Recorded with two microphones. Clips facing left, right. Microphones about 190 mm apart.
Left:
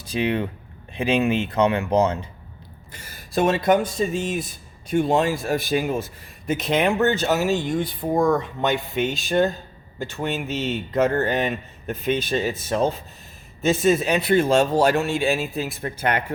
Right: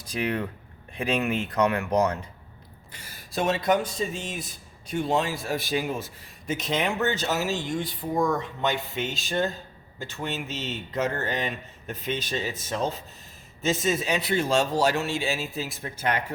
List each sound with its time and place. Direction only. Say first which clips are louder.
0.0 s speech: left 5 dB; 25° left (ahead or behind)
2.9 s speech: left 7 dB; 50° left (ahead or behind)